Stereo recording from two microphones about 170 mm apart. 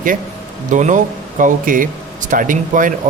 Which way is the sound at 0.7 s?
45° right (ahead or behind).